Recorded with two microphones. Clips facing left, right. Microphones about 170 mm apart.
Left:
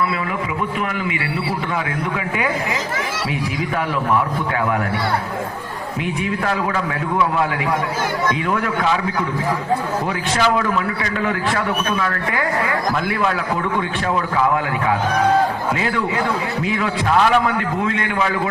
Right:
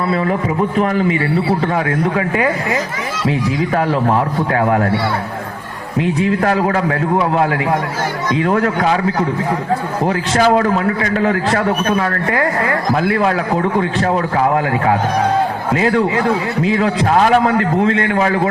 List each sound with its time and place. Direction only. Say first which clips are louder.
0.8 s a man's voice: right 8 dB; 40° right (ahead or behind)
3.8 s a man's voice: right 3 dB; 40° right (ahead or behind)
6.7 s a man's voice: right 6 dB; 50° right (ahead or behind)
7.2 s a man's voice: right 1 dB; 35° right (ahead or behind)
16.7 s a man's voice: right 3 dB; 40° right (ahead or behind)